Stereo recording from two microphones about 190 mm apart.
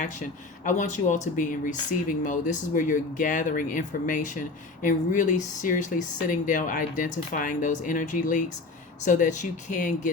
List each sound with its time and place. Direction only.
0.0 s speech: 40° left (ahead or behind)